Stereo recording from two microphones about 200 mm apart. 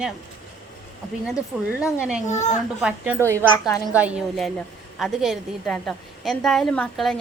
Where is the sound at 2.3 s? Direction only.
35° left (ahead or behind).